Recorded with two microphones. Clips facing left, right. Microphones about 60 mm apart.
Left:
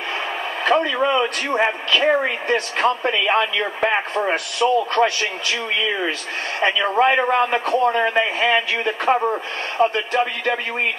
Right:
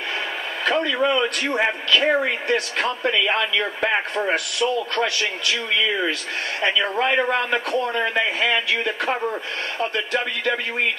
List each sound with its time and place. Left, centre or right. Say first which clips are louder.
0.7 s a man's voice: left 2 dB; left
6.6 s a man's voice: left 5 dB; left